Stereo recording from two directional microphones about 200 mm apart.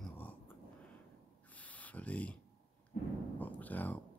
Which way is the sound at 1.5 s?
5° left (ahead or behind).